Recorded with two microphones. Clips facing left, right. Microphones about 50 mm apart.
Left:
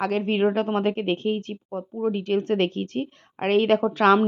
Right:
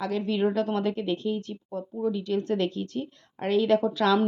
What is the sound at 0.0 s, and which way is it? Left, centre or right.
A woman's voice, left.